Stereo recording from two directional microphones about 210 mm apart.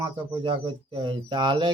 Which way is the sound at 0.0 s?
20° right (ahead or behind).